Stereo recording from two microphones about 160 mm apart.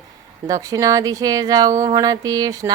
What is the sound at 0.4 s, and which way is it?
Speech, 20° right (ahead or behind).